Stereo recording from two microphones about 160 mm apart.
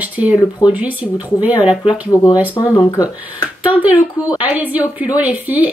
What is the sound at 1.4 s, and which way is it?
Speech, 10° right (ahead or behind).